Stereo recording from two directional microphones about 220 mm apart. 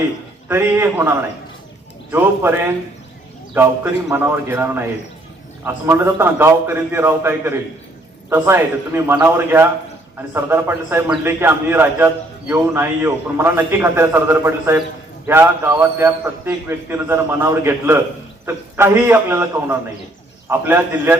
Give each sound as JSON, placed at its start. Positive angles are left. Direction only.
{"t": 0.4, "sound": "a man's voice", "side_deg": -10}
{"t": 2.1, "sound": "a man's voice", "side_deg": -10}